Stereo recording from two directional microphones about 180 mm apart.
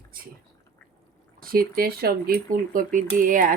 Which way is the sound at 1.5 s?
55° right (ahead or behind).